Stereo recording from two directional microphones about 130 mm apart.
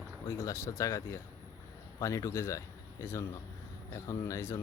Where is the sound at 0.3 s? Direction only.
20° left (ahead or behind).